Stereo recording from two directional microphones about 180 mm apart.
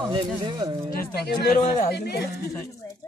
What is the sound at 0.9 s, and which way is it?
Speech, 65° left (ahead or behind).